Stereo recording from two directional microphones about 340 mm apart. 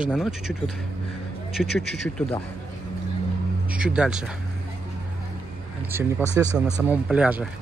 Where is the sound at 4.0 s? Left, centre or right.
Centre.